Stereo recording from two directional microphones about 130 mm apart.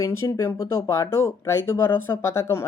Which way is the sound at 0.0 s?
25° left (ahead or behind).